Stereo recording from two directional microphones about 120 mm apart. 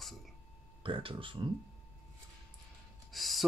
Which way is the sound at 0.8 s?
45° right (ahead or behind).